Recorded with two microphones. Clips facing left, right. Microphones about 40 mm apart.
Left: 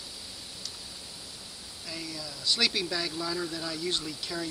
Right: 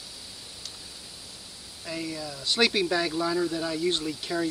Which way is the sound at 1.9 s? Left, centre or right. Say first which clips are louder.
Right 6 dB; right.